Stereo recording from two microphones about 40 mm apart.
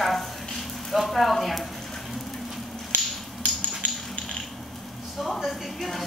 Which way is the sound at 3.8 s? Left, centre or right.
Left.